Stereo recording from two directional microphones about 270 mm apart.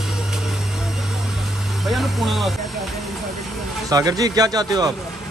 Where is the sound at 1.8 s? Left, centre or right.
Centre.